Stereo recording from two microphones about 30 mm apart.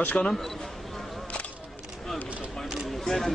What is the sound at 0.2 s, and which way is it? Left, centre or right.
Speech, left.